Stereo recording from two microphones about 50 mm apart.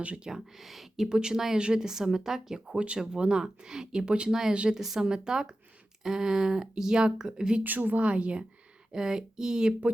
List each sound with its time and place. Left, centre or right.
0.3 s speech: centre
1.1 s speech: centre
2.7 s speech: right
4.7 s speech: centre
7.6 s speech: right
8.0 s speech: right